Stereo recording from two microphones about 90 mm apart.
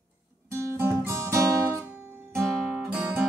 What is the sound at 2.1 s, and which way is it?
Music, 25° right (ahead or behind).